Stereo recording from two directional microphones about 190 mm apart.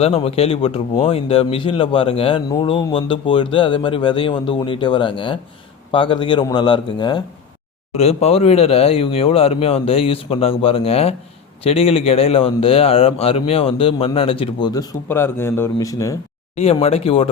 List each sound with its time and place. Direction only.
0.0 s speech: 30° left (ahead or behind)
16.6 s speech: 30° left (ahead or behind)